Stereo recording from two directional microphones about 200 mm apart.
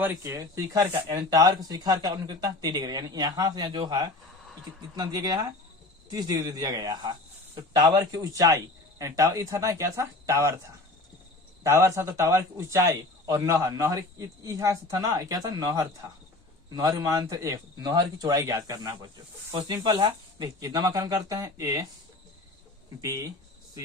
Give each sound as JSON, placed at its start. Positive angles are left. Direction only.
{"t": 0.0, "sound": "a man's voice", "side_deg": -15}
{"t": 23.0, "sound": "a man's voice", "side_deg": -15}